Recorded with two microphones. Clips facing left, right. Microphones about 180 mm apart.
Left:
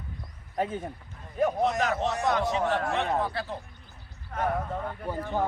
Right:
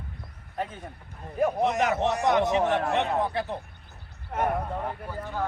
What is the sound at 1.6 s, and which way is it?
Speech, 20° right (ahead or behind).